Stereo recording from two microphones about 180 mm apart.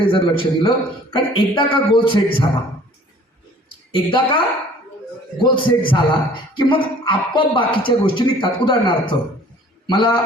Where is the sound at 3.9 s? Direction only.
30° left (ahead or behind).